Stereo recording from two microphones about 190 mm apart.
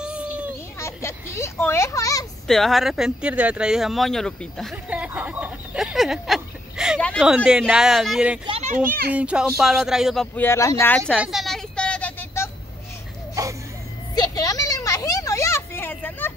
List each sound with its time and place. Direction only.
0.0 s a sound: 5° right (ahead or behind)
0.7 s a child's voice: 15° left (ahead or behind)
2.4 s speech: centre (ahead or behind)
8.5 s children playing: 30° right (ahead or behind)
9.1 s speech: 5° right (ahead or behind)
10.3 s speech: 10° left (ahead or behind)
11.1 s a sound: centre (ahead or behind)
13.3 s music: 15° right (ahead or behind)
14.1 s vehicle: 20° left (ahead or behind)